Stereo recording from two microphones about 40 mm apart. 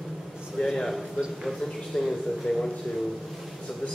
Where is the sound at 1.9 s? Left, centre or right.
Centre.